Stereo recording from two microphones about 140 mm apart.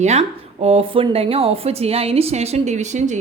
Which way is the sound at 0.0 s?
55° right (ahead or behind).